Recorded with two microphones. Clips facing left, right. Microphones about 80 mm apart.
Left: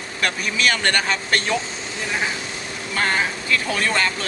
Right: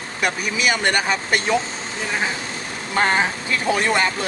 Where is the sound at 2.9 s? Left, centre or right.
Right.